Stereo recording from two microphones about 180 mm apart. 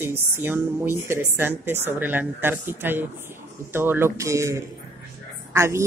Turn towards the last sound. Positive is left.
turn(degrees=-15)  # may be behind; listen again after turning